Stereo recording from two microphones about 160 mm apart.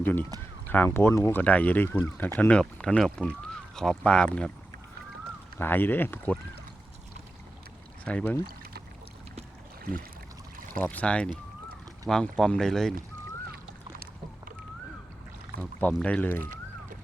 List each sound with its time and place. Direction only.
0.0 s speech: 10° left (ahead or behind)
5.5 s speech: 15° left (ahead or behind)
8.0 s speech: 10° left (ahead or behind)
10.8 s speech: 10° left (ahead or behind)
15.8 s speech: 10° left (ahead or behind)
16.4 s a sound: 60° right (ahead or behind)